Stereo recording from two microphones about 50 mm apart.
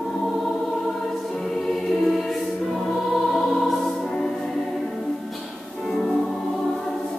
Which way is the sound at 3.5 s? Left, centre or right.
Centre.